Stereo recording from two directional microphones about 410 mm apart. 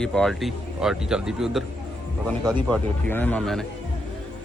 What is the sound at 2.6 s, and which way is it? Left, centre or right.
Speech, centre.